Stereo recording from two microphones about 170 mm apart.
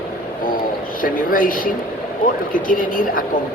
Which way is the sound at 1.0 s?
55° left (ahead or behind).